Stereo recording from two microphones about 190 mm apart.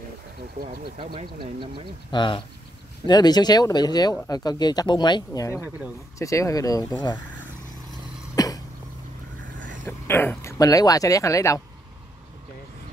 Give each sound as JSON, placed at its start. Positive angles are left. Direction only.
{"t": 0.9, "sound": "speech", "side_deg": -25}
{"t": 2.0, "sound": "speech", "side_deg": 25}
{"t": 8.4, "sound": "cough", "side_deg": 20}
{"t": 9.8, "sound": "speech", "side_deg": 10}